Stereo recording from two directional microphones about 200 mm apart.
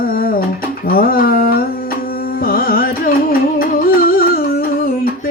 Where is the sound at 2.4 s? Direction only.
45° left (ahead or behind).